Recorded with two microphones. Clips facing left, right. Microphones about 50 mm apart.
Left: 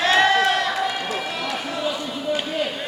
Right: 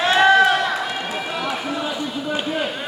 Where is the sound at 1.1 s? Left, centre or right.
Right.